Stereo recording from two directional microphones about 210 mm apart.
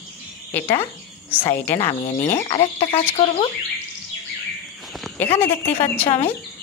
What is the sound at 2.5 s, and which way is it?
Speech, 25° left (ahead or behind).